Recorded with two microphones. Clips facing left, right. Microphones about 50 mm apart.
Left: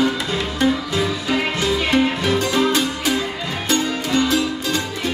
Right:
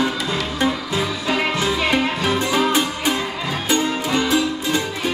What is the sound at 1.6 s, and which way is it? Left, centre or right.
Music, right.